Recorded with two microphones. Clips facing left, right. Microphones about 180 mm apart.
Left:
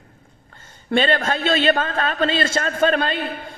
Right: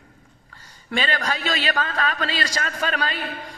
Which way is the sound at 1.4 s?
35° left (ahead or behind).